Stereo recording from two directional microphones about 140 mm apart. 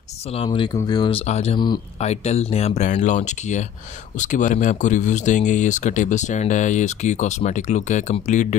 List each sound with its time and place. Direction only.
0.3 s speech: 40° left (ahead or behind)
1.1 s speech: 50° left (ahead or behind)